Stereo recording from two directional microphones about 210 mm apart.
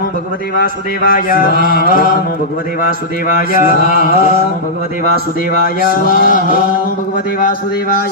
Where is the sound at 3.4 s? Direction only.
45° left (ahead or behind).